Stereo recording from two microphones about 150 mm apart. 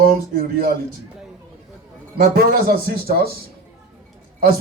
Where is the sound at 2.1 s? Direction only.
85° right.